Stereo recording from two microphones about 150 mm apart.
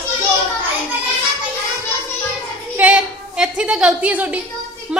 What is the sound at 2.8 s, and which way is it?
A woman's voice, 10° right (ahead or behind).